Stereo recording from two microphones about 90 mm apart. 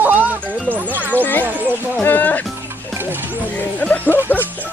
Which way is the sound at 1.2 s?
20° left (ahead or behind).